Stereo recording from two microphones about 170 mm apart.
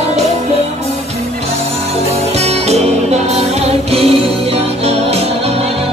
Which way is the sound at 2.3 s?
40° right (ahead or behind).